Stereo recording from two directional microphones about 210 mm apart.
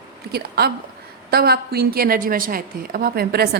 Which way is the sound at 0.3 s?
50° right (ahead or behind).